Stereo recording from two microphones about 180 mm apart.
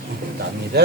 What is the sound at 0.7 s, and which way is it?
Speech, 60° right (ahead or behind).